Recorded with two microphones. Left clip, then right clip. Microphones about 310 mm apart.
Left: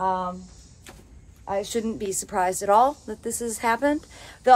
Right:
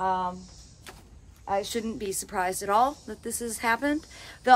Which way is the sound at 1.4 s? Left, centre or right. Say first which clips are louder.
Left 2 dB; centre.